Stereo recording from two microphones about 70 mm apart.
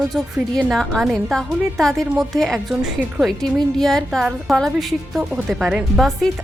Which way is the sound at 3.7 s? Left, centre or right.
Centre.